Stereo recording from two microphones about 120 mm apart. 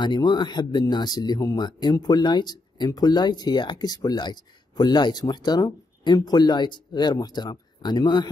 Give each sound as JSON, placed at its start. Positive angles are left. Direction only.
{"t": 0.0, "sound": "speech", "side_deg": 40}